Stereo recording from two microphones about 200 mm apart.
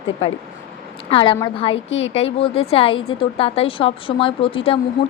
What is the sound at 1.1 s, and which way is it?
Speech, 25° left (ahead or behind).